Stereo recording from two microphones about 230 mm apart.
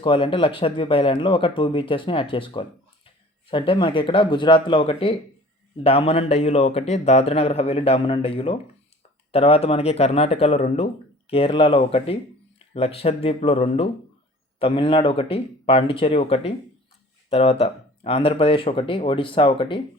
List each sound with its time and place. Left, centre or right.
0.0 s speech: left